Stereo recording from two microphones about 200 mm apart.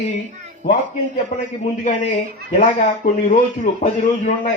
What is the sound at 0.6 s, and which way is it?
Speech, 40° left (ahead or behind).